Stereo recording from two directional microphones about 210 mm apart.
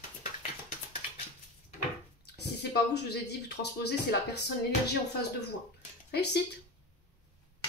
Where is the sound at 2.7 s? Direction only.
50° left (ahead or behind).